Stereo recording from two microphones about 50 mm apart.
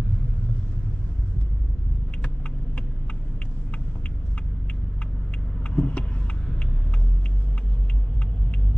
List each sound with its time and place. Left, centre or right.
5.7 s vehicle: left